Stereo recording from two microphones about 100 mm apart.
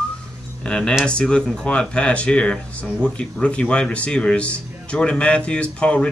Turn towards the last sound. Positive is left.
turn(degrees=10)  # may be behind; listen again after turning